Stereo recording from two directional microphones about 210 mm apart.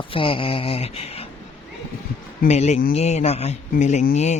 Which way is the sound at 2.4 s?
30° left (ahead or behind).